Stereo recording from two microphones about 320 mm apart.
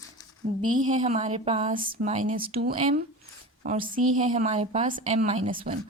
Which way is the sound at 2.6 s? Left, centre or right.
Right.